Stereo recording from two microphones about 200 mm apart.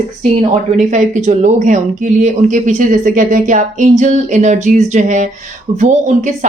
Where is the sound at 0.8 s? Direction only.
35° right (ahead or behind).